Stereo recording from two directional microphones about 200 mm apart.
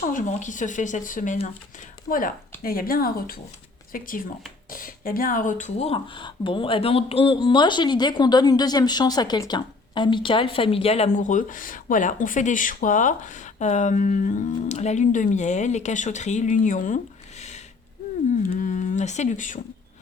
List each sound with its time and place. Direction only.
0.0 s speech: 40° left (ahead or behind)
18.4 s speech: 40° left (ahead or behind)